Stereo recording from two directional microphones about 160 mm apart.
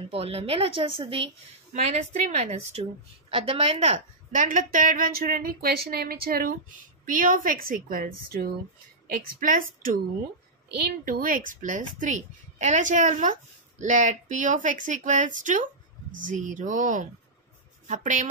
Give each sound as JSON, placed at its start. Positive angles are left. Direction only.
{"t": 0.1, "sound": "a woman's voice", "side_deg": -35}
{"t": 1.7, "sound": "a woman's voice", "side_deg": -45}
{"t": 9.1, "sound": "a woman's voice", "side_deg": -60}